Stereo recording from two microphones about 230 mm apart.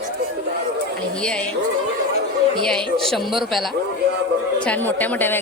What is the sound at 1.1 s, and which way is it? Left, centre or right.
Speech, centre.